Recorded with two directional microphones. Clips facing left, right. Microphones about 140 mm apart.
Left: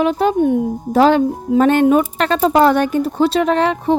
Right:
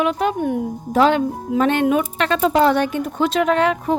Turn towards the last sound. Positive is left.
turn(degrees=35)  # may be behind; listen again after turning